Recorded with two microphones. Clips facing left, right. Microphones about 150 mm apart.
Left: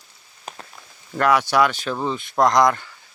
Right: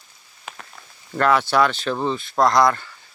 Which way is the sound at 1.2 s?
10° left (ahead or behind).